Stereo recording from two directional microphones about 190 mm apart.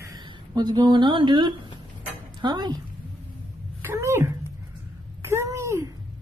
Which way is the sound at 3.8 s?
15° right (ahead or behind).